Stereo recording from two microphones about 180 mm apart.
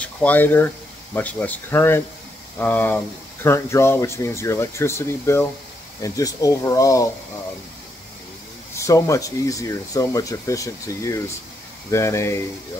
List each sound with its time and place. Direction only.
0.0 s speech: 10° left (ahead or behind)
8.7 s speech: 15° left (ahead or behind)